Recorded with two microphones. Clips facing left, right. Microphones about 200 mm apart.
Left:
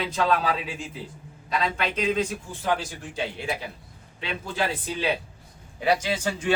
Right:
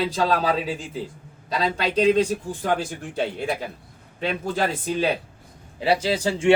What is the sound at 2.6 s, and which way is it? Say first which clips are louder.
Speech: right 1 dB; 50° right (ahead or behind).